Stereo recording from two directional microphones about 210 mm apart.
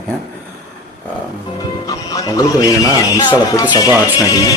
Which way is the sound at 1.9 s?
15° left (ahead or behind).